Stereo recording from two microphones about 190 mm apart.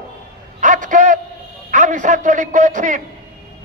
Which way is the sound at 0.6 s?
45° right (ahead or behind).